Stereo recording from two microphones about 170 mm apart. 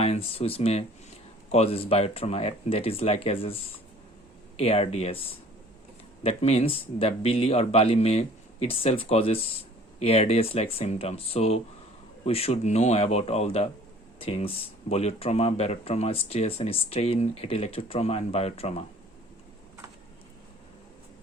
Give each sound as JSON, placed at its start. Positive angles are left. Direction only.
{"t": 0.0, "sound": "speech", "side_deg": 35}